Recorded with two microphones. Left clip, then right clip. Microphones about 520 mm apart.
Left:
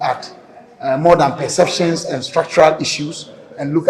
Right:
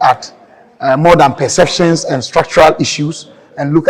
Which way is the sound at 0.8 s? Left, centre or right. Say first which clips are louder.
Right 4 dB; right.